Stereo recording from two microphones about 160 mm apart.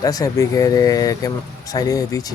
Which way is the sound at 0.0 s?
25° left (ahead or behind).